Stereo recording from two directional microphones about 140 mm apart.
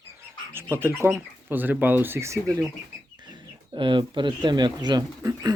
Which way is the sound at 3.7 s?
35° right (ahead or behind).